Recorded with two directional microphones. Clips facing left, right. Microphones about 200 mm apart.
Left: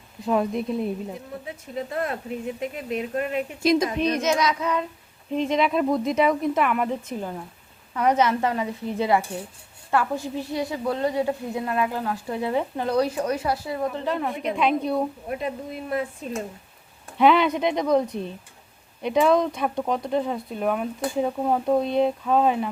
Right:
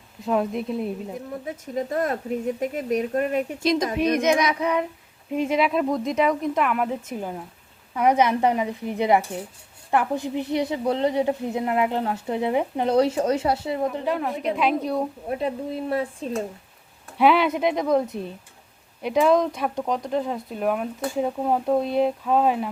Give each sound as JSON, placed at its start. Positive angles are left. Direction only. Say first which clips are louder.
{"t": 0.3, "sound": "speech", "louder": "even", "side_deg": 0}
{"t": 1.5, "sound": "speech", "louder": "right 4 dB", "side_deg": -45}
{"t": 3.6, "sound": "speech", "louder": "left 4 dB", "side_deg": 10}
{"t": 4.2, "sound": "a woman's voice", "louder": "right 2 dB", "side_deg": -15}
{"t": 15.3, "sound": "speech", "louder": "right 3 dB", "side_deg": -30}
{"t": 17.2, "sound": "speech", "louder": "even", "side_deg": -5}